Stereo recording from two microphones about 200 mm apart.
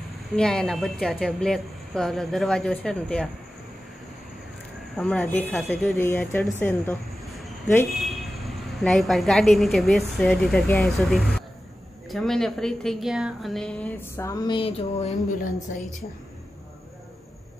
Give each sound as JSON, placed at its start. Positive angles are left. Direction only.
{"t": 0.4, "sound": "a woman's voice", "side_deg": 5}
{"t": 4.9, "sound": "a woman's voice", "side_deg": 5}
{"t": 6.6, "sound": "a sound", "side_deg": 10}
{"t": 7.9, "sound": "a woman's voice", "side_deg": 0}